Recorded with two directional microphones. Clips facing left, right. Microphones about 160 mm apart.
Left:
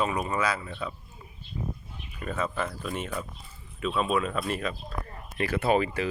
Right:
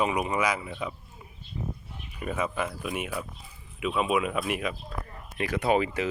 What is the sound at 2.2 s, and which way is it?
Speech, 10° right (ahead or behind).